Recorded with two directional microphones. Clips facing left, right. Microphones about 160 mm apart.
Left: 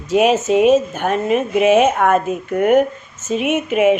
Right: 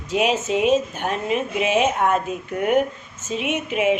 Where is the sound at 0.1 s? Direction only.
50° left (ahead or behind).